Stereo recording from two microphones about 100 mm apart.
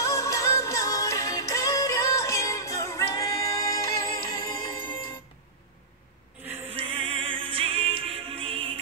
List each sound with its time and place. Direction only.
0.0 s music: 30° left (ahead or behind)
4.5 s music: 50° left (ahead or behind)
6.7 s music: 70° right (ahead or behind)